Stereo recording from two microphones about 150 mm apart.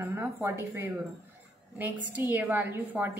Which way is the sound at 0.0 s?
15° right (ahead or behind).